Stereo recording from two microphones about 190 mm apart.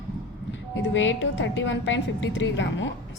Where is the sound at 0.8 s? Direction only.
75° left (ahead or behind).